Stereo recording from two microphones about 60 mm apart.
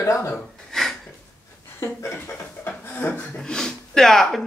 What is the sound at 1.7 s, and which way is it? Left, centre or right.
Speech, left.